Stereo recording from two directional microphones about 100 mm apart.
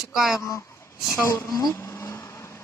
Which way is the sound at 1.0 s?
30° left (ahead or behind).